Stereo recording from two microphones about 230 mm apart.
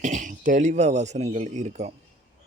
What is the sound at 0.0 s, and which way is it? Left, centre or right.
Speech, right.